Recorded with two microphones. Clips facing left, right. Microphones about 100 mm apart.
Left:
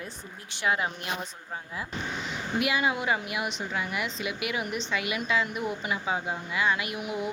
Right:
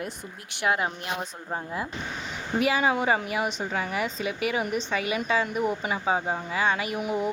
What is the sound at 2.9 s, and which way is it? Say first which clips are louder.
A woman's voice: right 4 dB; 40° right (ahead or behind).